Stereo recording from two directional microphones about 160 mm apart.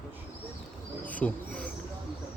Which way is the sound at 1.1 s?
10° left (ahead or behind).